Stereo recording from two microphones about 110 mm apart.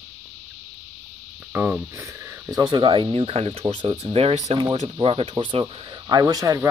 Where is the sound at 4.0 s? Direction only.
60° right (ahead or behind); by 4.5 s 75° right (ahead or behind).